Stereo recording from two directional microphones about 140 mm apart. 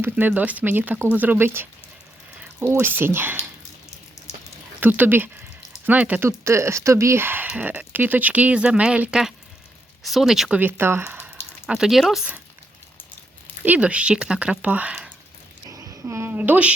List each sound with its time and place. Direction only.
0.0 s speech: 15° right (ahead or behind)
4.8 s speech: 15° right (ahead or behind)
10.6 s a sound: 15° right (ahead or behind)
11.7 s speech: 5° right (ahead or behind)
13.6 s speech: 10° right (ahead or behind)
15.7 s babbling: 20° right (ahead or behind)